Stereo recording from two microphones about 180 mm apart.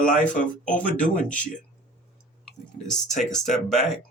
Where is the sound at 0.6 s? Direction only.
45° left (ahead or behind).